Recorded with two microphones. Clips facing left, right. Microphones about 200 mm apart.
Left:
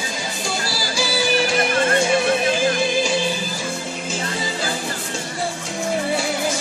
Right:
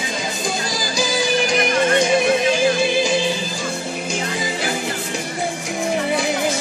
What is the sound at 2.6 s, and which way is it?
Music, 20° right (ahead or behind).